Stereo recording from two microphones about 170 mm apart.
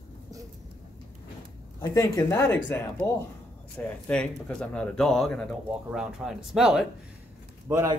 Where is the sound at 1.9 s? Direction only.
20° left (ahead or behind); by 6.8 s 5° right (ahead or behind).